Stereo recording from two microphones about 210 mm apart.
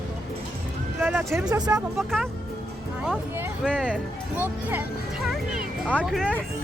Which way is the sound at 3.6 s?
5° left (ahead or behind).